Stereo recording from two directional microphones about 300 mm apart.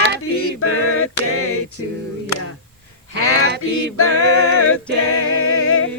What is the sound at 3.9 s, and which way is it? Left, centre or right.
Speech, left.